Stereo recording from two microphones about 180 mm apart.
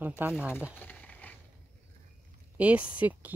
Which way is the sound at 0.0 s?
10° right (ahead or behind).